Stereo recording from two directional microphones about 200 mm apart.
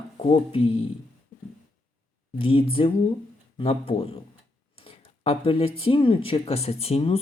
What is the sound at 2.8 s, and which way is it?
Speech, 30° left (ahead or behind).